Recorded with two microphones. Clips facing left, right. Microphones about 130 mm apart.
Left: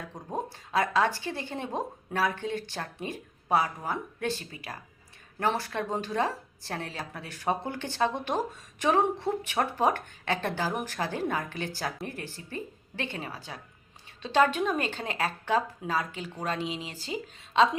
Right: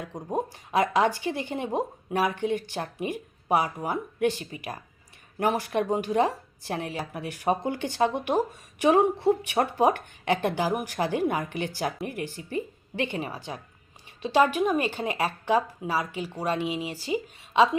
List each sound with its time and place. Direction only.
0.1 s speech: 15° right (ahead or behind)